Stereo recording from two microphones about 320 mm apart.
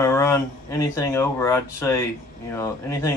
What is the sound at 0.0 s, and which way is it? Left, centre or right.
Speech, centre.